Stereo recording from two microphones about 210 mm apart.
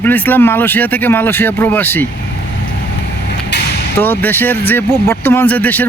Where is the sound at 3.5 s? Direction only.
55° left (ahead or behind).